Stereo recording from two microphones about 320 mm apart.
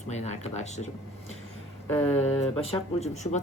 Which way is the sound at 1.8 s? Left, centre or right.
Centre.